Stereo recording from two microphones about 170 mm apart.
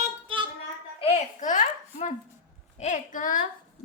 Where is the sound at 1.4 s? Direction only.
50° left (ahead or behind).